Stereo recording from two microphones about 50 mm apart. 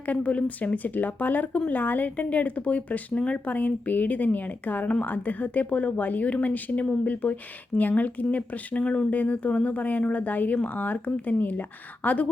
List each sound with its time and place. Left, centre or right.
0.0 s a woman's voice: left